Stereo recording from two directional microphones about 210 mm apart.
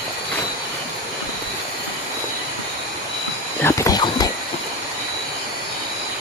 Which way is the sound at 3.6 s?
15° left (ahead or behind).